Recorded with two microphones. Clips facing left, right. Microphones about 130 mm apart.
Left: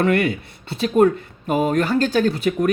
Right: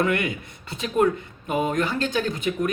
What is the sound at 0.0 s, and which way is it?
Speech, 35° left (ahead or behind).